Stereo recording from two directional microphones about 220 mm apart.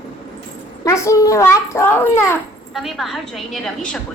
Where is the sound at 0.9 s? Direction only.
15° left (ahead or behind).